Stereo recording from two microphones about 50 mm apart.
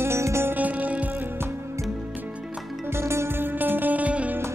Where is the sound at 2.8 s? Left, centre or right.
Right.